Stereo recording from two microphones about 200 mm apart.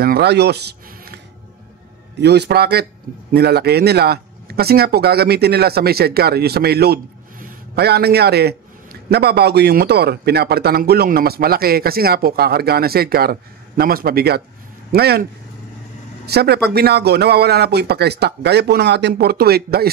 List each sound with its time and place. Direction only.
0.0 s speech: 50° right (ahead or behind)
16.3 s speech: 55° right (ahead or behind)